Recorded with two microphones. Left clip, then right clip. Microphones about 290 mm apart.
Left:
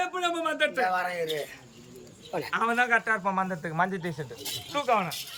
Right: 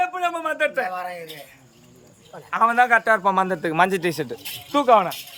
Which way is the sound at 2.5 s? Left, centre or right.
Centre.